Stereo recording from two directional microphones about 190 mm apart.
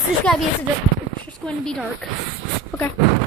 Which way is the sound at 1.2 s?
5° left (ahead or behind).